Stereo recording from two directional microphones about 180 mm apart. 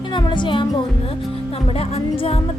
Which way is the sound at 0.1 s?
25° left (ahead or behind).